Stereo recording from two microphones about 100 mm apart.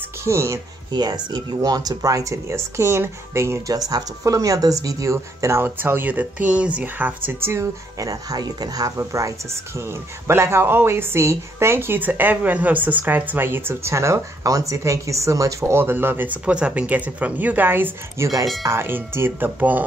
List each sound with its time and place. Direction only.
0.2 s speech: 25° right (ahead or behind)
0.9 s speech: 45° right (ahead or behind); by 7.3 s 15° right (ahead or behind)
7.4 s speech: 30° right (ahead or behind)
15.8 s speech: 20° right (ahead or behind)